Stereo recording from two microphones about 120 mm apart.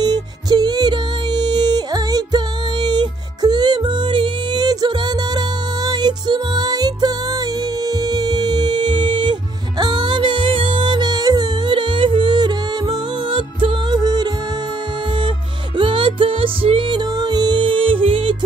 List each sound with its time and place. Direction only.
0.0 s music: 35° right (ahead or behind)
8.1 s music: 35° right (ahead or behind)
15.8 s music: 45° right (ahead or behind)
17.2 s music: 35° right (ahead or behind)